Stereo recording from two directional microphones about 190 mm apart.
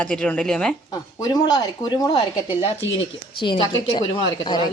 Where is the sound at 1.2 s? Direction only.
20° left (ahead or behind).